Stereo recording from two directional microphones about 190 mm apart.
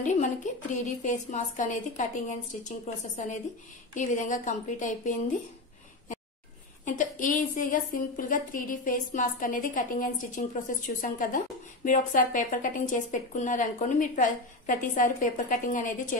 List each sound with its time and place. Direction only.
0.0 s a woman's voice: 40° left (ahead or behind)
3.9 s a woman's voice: 40° left (ahead or behind)
6.8 s a woman's voice: 40° left (ahead or behind)